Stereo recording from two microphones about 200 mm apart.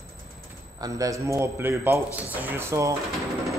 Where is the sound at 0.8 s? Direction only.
15° right (ahead or behind).